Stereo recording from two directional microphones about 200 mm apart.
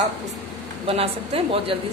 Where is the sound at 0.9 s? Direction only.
30° right (ahead or behind).